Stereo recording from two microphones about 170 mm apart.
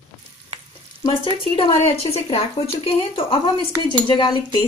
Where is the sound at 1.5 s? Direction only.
30° left (ahead or behind).